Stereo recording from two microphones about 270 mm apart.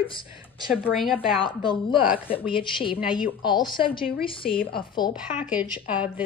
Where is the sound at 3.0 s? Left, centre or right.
Centre.